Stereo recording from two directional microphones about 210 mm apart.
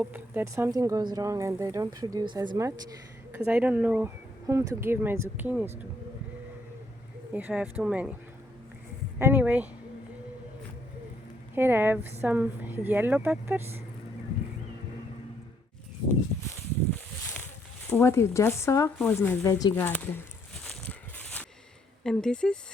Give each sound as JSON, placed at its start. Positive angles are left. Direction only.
{"t": 0.0, "sound": "speech", "side_deg": -10}
{"t": 3.3, "sound": "speech", "side_deg": -5}
{"t": 7.3, "sound": "speech", "side_deg": -5}
{"t": 9.1, "sound": "speech", "side_deg": -10}
{"t": 11.5, "sound": "speech", "side_deg": -10}
{"t": 17.8, "sound": "speech", "side_deg": 10}
{"t": 20.7, "sound": "a sound", "side_deg": 5}
{"t": 22.0, "sound": "speech", "side_deg": 5}